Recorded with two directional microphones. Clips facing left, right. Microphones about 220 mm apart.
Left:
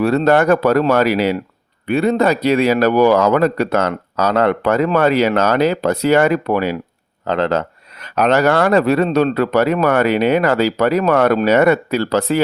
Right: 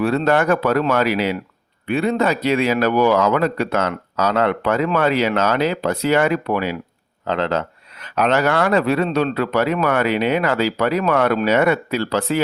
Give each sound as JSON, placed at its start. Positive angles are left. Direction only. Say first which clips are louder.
{"t": 0.0, "sound": "speech", "louder": "left 4 dB", "side_deg": 40}